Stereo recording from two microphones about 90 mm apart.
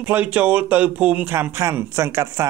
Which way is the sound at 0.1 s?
20° right (ahead or behind).